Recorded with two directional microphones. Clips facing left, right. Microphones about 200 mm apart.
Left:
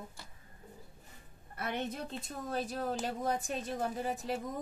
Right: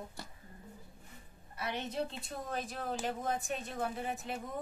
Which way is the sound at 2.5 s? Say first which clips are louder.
Left 4 dB; 40° left (ahead or behind).